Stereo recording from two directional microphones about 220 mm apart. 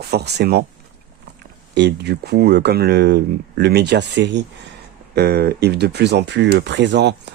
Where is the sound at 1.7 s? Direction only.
50° right (ahead or behind).